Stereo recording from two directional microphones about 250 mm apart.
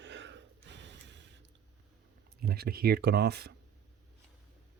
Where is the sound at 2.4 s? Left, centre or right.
Right.